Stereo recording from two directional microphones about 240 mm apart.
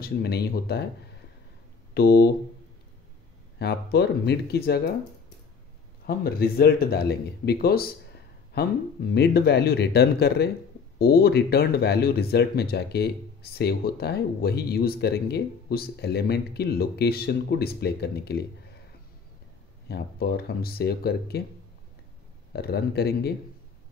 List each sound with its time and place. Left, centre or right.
0.0 s speech: left
2.0 s a sound: left
3.5 s speech: left
6.0 s speech: left
19.9 s speech: left
22.5 s speech: left